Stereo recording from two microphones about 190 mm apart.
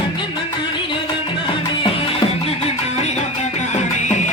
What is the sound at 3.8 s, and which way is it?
Music, 35° left (ahead or behind).